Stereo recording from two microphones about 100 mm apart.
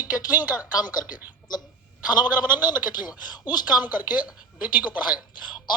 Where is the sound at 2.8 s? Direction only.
45° left (ahead or behind).